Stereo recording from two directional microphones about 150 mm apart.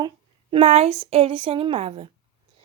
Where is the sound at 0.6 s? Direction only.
45° right (ahead or behind).